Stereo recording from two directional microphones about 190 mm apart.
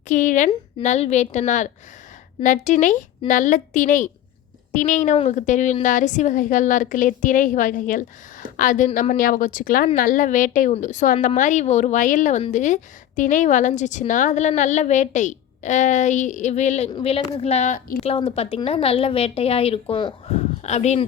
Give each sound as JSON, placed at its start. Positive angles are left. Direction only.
{"t": 0.1, "sound": "a woman's voice", "side_deg": 40}
{"t": 18.0, "sound": "a woman's voice", "side_deg": 30}